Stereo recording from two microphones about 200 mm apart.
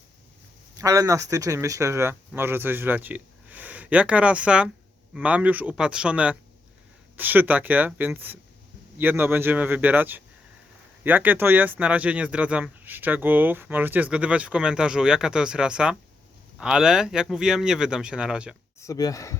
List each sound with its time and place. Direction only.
0.8 s speech: 15° right (ahead or behind)
18.8 s speech: 15° left (ahead or behind)